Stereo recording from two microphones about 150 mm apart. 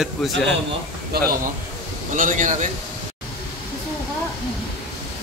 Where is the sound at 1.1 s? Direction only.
90° right.